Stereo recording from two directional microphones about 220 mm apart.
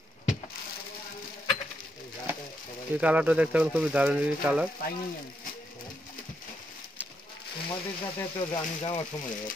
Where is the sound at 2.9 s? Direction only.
5° right (ahead or behind).